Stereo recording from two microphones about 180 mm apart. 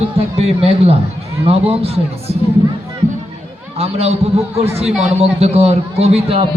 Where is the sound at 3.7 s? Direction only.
35° right (ahead or behind).